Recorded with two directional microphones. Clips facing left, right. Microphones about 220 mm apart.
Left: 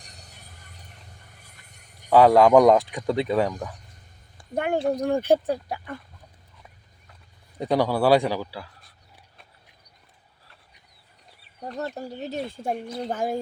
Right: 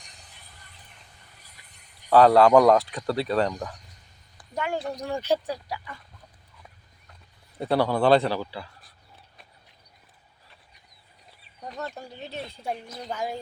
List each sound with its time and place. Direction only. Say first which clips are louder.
0.0 s music: left 4 dB; 40° left (ahead or behind)
1.4 s a sound: left 3 dB; 50° left (ahead or behind)
2.0 s speech: left 1 dB; 15° left (ahead or behind)
4.5 s speech: left 6 dB; 55° left (ahead or behind)
7.6 s speech: left 1 dB; 15° left (ahead or behind)
11.8 s speech: left 5 dB; 40° left (ahead or behind)